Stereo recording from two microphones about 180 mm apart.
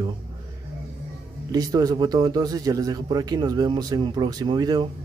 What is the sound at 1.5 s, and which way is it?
Speech, 20° right (ahead or behind).